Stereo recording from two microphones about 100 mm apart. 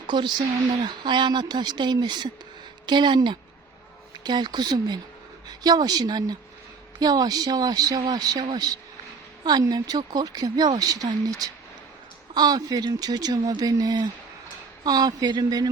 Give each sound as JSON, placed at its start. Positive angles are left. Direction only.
{"t": 0.1, "sound": "speech", "side_deg": -50}